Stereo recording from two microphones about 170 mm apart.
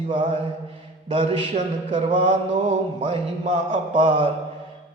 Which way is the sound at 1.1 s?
35° right (ahead or behind).